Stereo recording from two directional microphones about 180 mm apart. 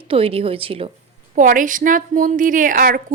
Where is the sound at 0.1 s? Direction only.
30° right (ahead or behind).